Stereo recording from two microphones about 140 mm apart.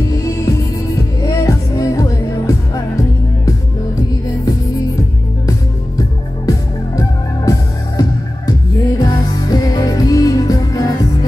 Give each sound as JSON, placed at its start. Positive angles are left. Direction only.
{"t": 0.1, "sound": "music", "side_deg": 25}
{"t": 5.5, "sound": "music", "side_deg": 25}